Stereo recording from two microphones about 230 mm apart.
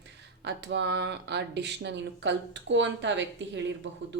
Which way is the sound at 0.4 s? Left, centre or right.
Right.